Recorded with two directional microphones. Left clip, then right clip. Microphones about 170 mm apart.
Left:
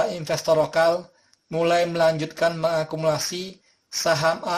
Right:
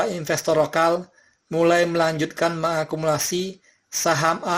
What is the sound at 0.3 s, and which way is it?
Speech, 20° right (ahead or behind).